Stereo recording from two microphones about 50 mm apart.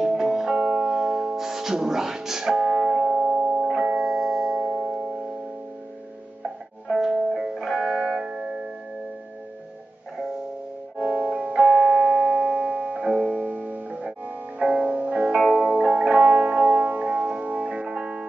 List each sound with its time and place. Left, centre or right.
0.1 s music: centre
7.0 s music: centre
8.0 s music: centre
11.0 s music: right
15.2 s music: centre
15.5 s music: right